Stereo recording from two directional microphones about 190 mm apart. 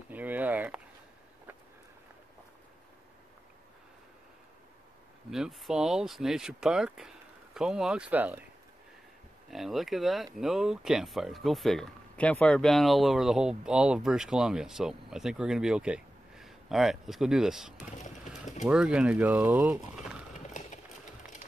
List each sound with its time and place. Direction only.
0.1 s a sound: 10° right (ahead or behind)
5.3 s speech: 5° right (ahead or behind)
9.5 s speech: centre (ahead or behind)
20.3 s clip-clop: 40° left (ahead or behind)